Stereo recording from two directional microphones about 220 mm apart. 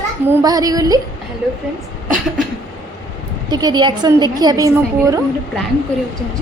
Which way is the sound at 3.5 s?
20° right (ahead or behind).